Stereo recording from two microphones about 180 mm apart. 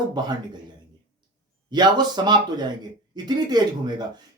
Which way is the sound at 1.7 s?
25° right (ahead or behind).